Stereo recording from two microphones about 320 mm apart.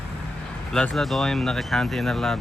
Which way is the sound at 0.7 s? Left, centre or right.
Centre.